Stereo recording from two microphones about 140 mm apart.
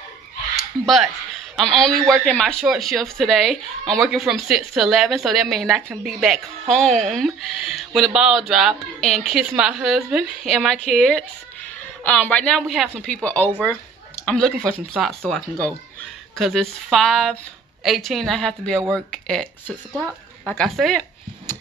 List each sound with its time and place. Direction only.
0.8 s speech: centre (ahead or behind)
20.4 s speech: 5° left (ahead or behind)